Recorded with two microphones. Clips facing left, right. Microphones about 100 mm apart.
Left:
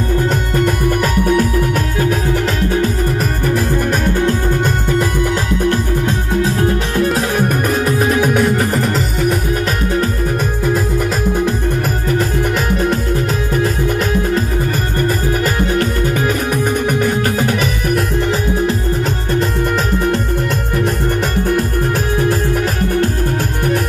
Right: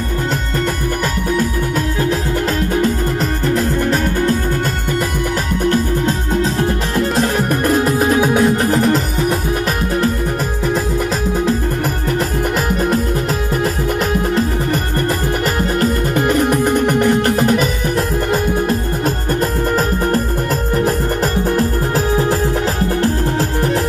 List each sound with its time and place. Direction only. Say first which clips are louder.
8.1 s music: right 1 dB; 25° right (ahead or behind)
8.7 s music: right 3 dB; centre (ahead or behind)